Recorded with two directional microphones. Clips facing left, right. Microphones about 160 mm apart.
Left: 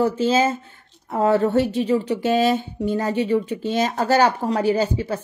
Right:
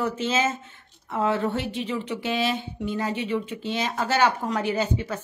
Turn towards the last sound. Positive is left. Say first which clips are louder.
# left 5 dB
turn(degrees=30)  # may be behind; listen again after turning